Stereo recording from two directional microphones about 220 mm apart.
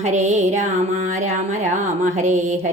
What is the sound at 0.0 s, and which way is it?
Speech, 30° right (ahead or behind).